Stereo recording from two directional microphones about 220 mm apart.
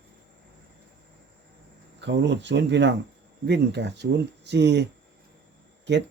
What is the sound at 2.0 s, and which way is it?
Speech, 50° right (ahead or behind).